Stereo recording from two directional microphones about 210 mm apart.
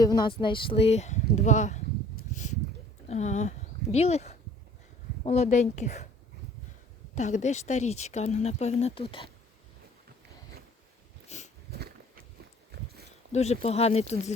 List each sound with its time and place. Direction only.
0.0 s speech: 20° left (ahead or behind); by 1.8 s 35° left (ahead or behind)
2.3 s a sound: 35° left (ahead or behind)
3.1 s speech: 35° left (ahead or behind)
7.2 s speech: 35° left (ahead or behind)
11.3 s dog: 35° left (ahead or behind)
11.7 s a sound: 50° right (ahead or behind)
13.3 s speech: 30° left (ahead or behind)